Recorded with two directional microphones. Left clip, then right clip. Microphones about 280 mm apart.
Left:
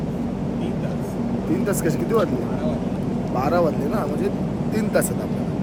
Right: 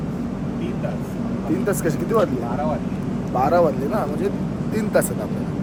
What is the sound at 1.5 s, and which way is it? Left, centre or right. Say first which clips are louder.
Speech: right 1 dB; centre.